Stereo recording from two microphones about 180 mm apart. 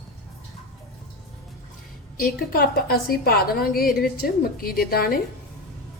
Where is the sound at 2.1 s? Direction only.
50° left (ahead or behind).